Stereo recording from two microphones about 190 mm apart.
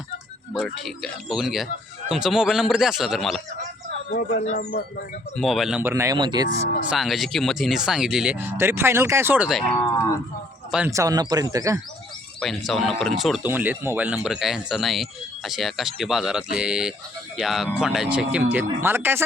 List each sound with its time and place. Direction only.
0.6 s speech: centre (ahead or behind)
4.1 s speech: 50° left (ahead or behind)
5.4 s speech: centre (ahead or behind)
5.9 s speech: 15° right (ahead or behind)
6.9 s speech: centre (ahead or behind); by 11.8 s 15° right (ahead or behind)
12.4 s speech: centre (ahead or behind)